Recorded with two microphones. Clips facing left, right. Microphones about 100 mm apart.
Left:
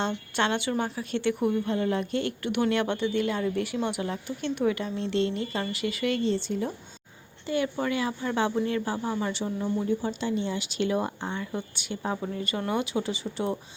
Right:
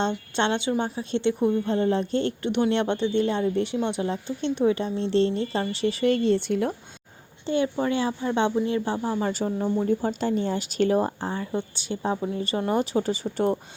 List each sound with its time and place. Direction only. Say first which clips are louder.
0.3 s a woman's voice: right 2 dB; 25° right (ahead or behind); by 6.7 s 65° right (ahead or behind)
7.4 s a woman's voice: right 3 dB; 25° right (ahead or behind)
9.2 s speech: right 4 dB; 40° right (ahead or behind)